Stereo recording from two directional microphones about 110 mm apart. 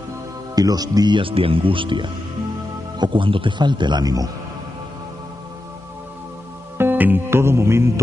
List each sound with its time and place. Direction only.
0.6 s speech: 35° right (ahead or behind)
6.8 s music: 15° right (ahead or behind)